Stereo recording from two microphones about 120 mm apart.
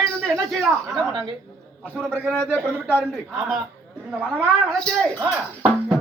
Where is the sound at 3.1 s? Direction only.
Centre (ahead or behind).